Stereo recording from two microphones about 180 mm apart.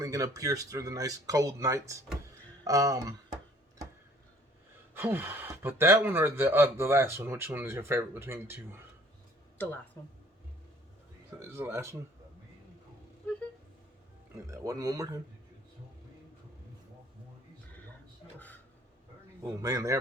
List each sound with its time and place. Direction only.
0.0 s speech: 20° right (ahead or behind)
4.9 s speech: 10° right (ahead or behind)
10.0 s speech: 15° left (ahead or behind)
11.5 s speech: 15° right (ahead or behind)
14.5 s speech: 20° right (ahead or behind)
19.4 s speech: 15° right (ahead or behind)